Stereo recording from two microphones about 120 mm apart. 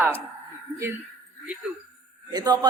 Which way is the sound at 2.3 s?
30° right (ahead or behind).